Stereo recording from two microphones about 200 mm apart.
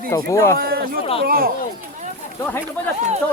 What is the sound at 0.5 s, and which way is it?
Speech, 50° right (ahead or behind).